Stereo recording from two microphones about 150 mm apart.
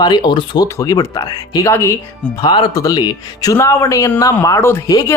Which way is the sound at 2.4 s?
30° left (ahead or behind).